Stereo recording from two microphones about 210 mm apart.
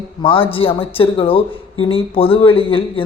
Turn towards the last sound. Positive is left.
turn(degrees=25)  # may be behind; listen again after turning